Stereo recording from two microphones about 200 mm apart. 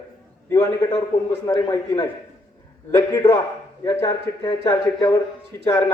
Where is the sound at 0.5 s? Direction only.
15° left (ahead or behind).